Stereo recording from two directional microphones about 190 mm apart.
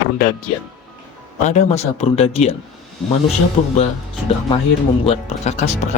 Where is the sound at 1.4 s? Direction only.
35° left (ahead or behind).